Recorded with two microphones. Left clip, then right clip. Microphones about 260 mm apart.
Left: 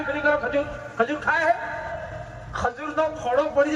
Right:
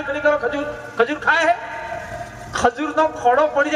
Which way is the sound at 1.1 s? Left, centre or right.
Right.